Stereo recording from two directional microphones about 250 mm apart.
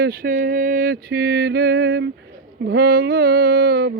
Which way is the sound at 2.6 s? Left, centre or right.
Right.